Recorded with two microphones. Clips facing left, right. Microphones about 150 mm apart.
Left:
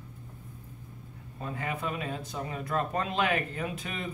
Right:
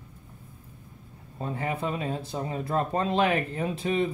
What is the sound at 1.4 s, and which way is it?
Speech, 30° right (ahead or behind).